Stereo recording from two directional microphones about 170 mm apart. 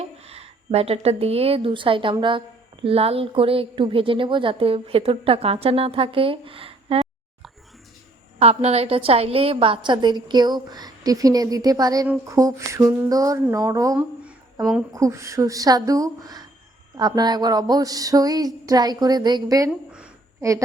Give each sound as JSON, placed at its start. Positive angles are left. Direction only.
{"t": 0.0, "sound": "a woman's voice", "side_deg": -35}
{"t": 8.4, "sound": "a woman's voice", "side_deg": -35}
{"t": 14.3, "sound": "a sound", "side_deg": -15}
{"t": 14.9, "sound": "a woman's voice", "side_deg": -20}